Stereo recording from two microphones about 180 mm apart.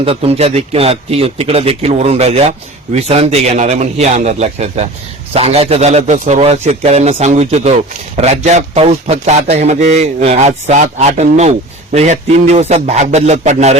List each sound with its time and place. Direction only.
0.0 s a man's voice: 35° right (ahead or behind)